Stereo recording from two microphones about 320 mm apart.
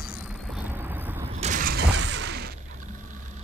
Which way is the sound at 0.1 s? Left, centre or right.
Centre.